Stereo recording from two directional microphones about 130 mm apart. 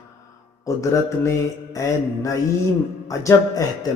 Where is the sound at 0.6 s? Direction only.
25° left (ahead or behind).